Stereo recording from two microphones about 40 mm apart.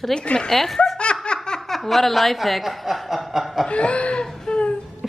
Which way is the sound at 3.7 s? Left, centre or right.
Left.